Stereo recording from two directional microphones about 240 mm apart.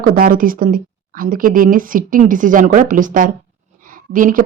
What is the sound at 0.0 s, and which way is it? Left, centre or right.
Speech, right.